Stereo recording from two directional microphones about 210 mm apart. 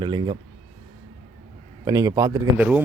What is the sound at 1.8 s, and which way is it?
Speech, 15° right (ahead or behind).